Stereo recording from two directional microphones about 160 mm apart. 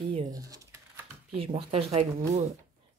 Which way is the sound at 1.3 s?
35° right (ahead or behind).